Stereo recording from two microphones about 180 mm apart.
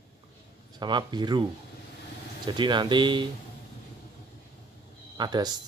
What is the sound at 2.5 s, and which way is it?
Speech, 25° right (ahead or behind).